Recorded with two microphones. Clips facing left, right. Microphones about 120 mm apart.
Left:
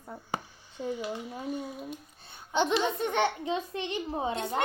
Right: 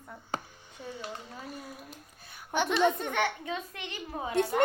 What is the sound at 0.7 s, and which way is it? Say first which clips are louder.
Speech: left 7 dB; 15° left (ahead or behind).